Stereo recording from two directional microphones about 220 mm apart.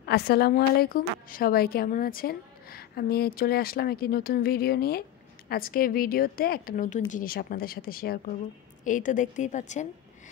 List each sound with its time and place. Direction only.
0.0 s a woman's voice: 45° left (ahead or behind)